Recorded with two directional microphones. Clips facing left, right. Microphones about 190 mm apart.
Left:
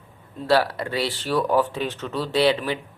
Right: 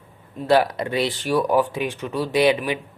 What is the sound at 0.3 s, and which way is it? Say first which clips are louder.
Speech: right 2 dB; 15° right (ahead or behind).